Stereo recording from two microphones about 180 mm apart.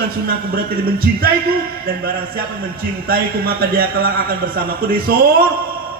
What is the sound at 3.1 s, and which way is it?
A man's voice, 55° right (ahead or behind).